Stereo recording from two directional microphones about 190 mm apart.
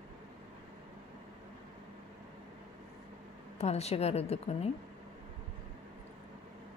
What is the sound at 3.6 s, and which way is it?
A woman's voice, 35° left (ahead or behind).